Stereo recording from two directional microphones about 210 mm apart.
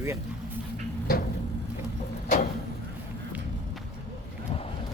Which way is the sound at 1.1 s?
45° left (ahead or behind).